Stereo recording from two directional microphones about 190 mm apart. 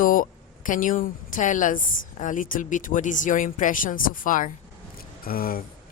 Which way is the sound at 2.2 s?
45° left (ahead or behind).